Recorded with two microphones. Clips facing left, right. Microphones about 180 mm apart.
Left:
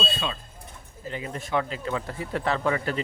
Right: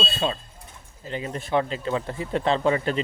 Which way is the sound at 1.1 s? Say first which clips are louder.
Right 3 dB; 30° right (ahead or behind).